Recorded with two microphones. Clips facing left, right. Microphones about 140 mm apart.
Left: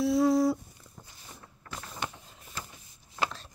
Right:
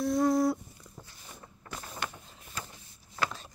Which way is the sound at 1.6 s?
20° right (ahead or behind).